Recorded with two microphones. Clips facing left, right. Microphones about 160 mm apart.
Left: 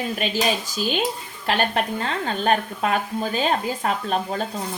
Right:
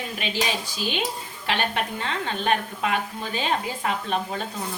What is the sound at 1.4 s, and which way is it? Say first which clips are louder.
Stir: left 4 dB; 40° left (ahead or behind).